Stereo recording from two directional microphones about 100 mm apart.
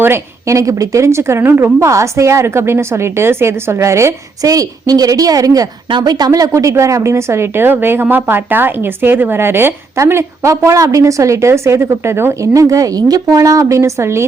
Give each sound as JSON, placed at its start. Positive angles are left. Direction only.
{"t": 0.0, "sound": "a woman's voice", "side_deg": -25}